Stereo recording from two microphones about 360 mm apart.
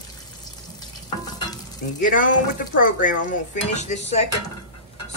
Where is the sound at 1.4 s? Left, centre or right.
Centre.